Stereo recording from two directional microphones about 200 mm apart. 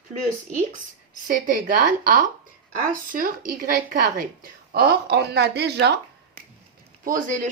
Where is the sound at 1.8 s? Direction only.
45° right (ahead or behind).